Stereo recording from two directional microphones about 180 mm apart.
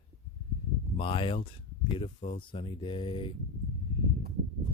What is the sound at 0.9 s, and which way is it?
Speech, 30° left (ahead or behind).